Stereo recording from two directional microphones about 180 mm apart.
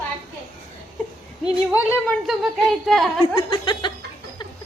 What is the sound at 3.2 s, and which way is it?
Speech, 30° left (ahead or behind).